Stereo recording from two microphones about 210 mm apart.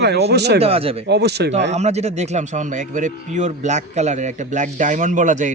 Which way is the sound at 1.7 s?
30° right (ahead or behind).